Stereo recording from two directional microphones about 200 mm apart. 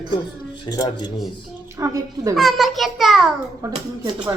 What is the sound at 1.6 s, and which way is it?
Speech, 15° right (ahead or behind).